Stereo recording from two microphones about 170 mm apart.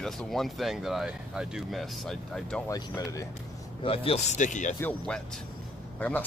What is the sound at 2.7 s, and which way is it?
Speech, 20° left (ahead or behind).